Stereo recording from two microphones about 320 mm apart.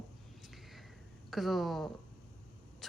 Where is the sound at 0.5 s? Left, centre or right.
Centre.